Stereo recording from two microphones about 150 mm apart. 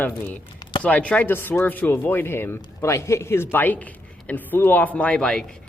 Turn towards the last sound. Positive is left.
turn(degrees=5)  # may be behind; listen again after turning